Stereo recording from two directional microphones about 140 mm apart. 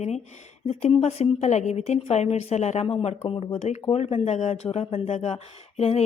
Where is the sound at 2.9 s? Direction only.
45° left (ahead or behind).